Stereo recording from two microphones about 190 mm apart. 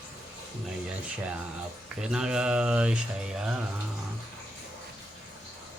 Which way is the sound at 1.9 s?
5° right (ahead or behind).